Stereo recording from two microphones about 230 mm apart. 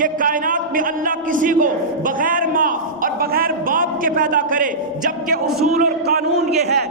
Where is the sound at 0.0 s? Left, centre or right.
Right.